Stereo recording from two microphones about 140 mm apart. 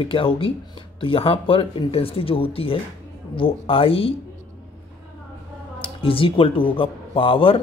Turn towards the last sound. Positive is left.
turn(degrees=40)  # may be behind; listen again after turning